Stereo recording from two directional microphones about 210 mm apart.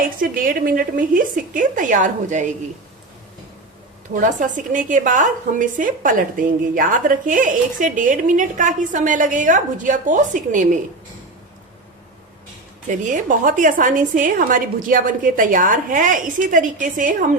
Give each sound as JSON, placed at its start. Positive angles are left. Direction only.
{"t": 0.2, "sound": "a woman's voice", "side_deg": -40}
{"t": 4.1, "sound": "a woman's voice", "side_deg": -40}
{"t": 12.9, "sound": "a woman's voice", "side_deg": -35}